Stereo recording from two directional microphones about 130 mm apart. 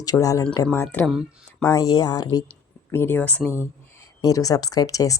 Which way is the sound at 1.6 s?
30° left (ahead or behind).